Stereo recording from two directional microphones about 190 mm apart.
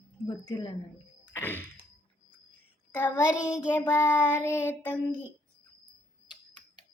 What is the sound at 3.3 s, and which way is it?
Child singing, 5° right (ahead or behind).